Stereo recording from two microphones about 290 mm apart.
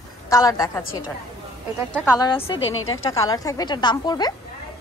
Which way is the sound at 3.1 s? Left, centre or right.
Centre.